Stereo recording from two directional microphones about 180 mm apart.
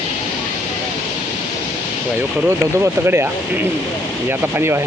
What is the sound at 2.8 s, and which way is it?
Speech, 15° right (ahead or behind).